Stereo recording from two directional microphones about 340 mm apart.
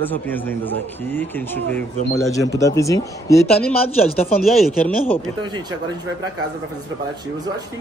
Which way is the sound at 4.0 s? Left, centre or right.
Centre.